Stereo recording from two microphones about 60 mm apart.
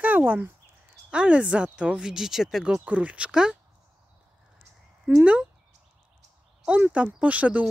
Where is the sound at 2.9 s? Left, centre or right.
Right.